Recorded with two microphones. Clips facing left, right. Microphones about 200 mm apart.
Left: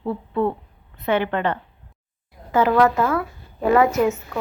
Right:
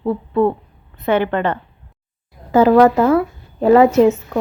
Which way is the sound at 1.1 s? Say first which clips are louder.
Right 4 dB; 45° right (ahead or behind).